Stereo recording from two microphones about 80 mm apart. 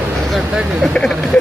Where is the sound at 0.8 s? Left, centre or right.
Centre.